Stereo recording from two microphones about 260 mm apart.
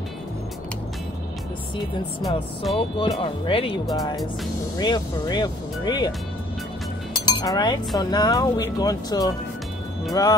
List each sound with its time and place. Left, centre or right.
2.2 s speech: centre
2.8 s speech: centre
7.2 s speech: centre